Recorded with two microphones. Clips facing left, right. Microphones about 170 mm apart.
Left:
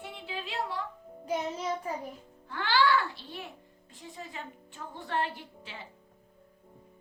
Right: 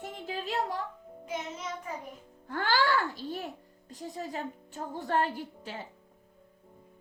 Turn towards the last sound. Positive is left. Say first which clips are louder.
# right 6 dB
turn(degrees=-45)  # may be behind; listen again after turning